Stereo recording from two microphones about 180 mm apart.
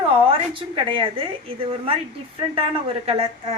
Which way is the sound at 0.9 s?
30° right (ahead or behind).